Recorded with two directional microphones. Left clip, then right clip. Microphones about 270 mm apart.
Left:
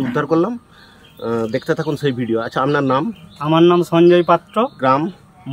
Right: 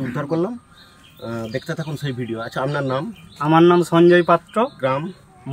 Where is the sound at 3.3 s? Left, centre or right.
Centre.